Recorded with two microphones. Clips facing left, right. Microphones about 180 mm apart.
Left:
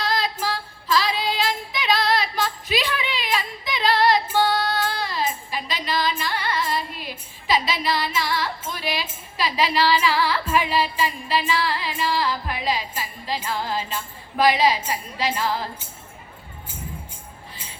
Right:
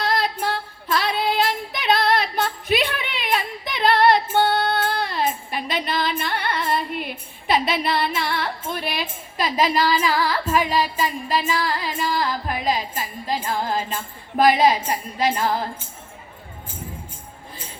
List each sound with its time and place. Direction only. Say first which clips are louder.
0.0 s female singing: right 2 dB; 60° right (ahead or behind)
14.3 s a woman's voice: right 3 dB; 50° right (ahead or behind)